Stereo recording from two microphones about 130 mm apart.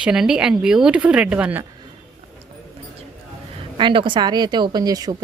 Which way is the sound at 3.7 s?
40° right (ahead or behind).